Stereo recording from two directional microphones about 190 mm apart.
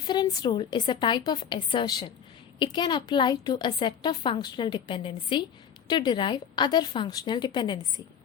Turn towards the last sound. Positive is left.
turn(degrees=20)  # may be behind; listen again after turning